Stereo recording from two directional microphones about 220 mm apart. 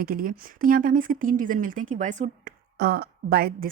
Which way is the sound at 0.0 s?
40° right (ahead or behind).